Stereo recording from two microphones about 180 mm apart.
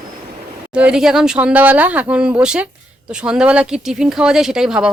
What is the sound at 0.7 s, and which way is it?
Speech, 5° right (ahead or behind).